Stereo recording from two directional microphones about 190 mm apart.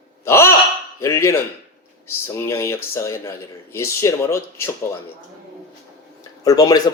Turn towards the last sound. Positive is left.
turn(degrees=20)  # may be behind; listen again after turning